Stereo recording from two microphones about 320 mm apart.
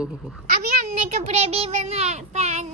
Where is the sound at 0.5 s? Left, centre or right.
Right.